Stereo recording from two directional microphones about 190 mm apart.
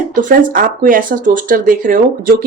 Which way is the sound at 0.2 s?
45° right (ahead or behind).